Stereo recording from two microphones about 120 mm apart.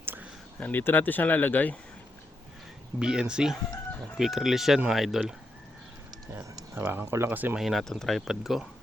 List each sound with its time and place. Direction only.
0.0 s a sound: 15° right (ahead or behind)
0.6 s speech: 15° left (ahead or behind)
3.0 s speech: 5° right (ahead or behind)
6.3 s speech: 15° right (ahead or behind)
7.6 s speech: centre (ahead or behind)